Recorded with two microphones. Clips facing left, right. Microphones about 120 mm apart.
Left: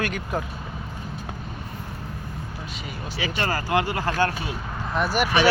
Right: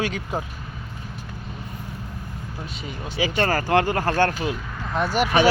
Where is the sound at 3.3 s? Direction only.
45° right (ahead or behind).